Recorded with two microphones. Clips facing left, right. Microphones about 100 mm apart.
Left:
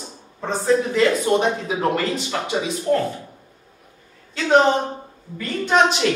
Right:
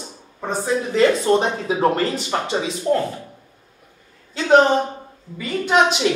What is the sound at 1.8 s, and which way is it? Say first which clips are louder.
Speech: right 2 dB; 30° right (ahead or behind).